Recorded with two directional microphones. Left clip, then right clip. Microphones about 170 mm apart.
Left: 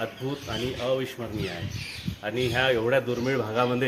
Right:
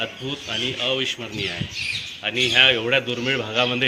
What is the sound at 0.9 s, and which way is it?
Speech, 30° left (ahead or behind).